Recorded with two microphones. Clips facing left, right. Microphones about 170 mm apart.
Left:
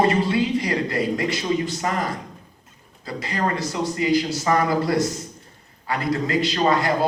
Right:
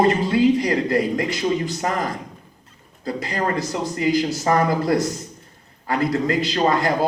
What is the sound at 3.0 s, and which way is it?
Speech, 45° right (ahead or behind).